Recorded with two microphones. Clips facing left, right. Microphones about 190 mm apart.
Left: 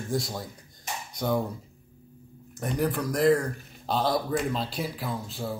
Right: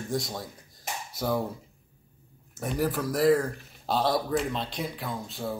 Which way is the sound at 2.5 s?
5° right (ahead or behind).